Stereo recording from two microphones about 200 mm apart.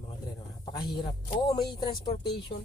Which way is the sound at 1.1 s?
25° left (ahead or behind).